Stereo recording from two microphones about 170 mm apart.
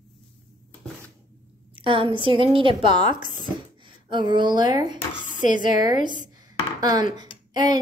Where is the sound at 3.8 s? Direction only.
30° right (ahead or behind).